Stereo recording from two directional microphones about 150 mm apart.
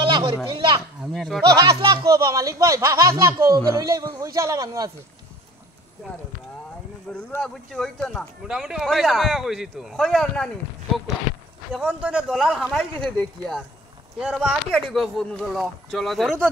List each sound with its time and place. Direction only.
0.0 s a sound: 35° right (ahead or behind)
0.5 s speech: 30° right (ahead or behind)
1.1 s speech: centre (ahead or behind)
1.5 s speech: 25° right (ahead or behind)
7.1 s speech: 5° left (ahead or behind)
11.7 s speech: 5° right (ahead or behind)